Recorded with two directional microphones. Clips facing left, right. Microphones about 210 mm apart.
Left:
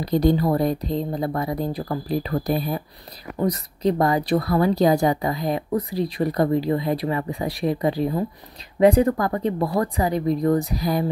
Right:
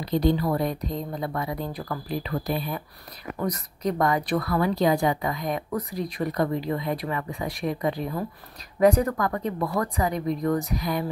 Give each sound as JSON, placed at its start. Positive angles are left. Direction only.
{"t": 0.0, "sound": "a woman's voice", "side_deg": 40}